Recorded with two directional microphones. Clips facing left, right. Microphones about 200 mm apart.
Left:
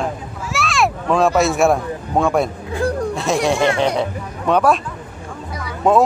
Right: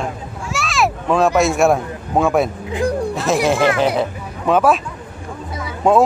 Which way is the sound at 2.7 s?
15° right (ahead or behind).